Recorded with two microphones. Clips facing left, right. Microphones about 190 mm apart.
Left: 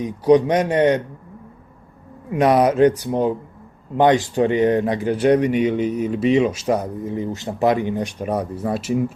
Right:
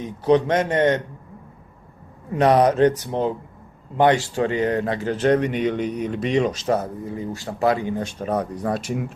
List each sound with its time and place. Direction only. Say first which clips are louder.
0.3 s speech: left 3 dB; 15° left (ahead or behind)
2.3 s speech: left 1 dB; 10° left (ahead or behind)